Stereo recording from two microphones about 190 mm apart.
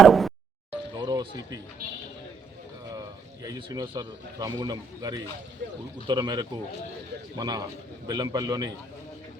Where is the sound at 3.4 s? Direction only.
20° right (ahead or behind).